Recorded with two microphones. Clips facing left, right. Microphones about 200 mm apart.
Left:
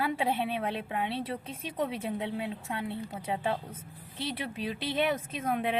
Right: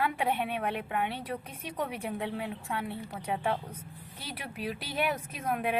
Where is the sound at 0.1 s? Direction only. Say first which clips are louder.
Left 1 dB; 25° left (ahead or behind).